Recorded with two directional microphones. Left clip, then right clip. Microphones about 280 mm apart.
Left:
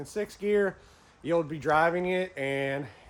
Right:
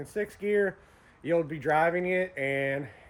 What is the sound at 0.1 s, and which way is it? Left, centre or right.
Speech, centre.